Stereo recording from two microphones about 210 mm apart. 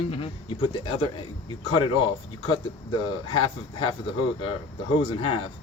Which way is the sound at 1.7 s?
25° left (ahead or behind).